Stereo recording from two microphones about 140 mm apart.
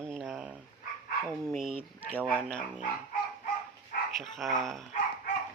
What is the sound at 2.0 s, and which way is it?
Speech, 15° left (ahead or behind).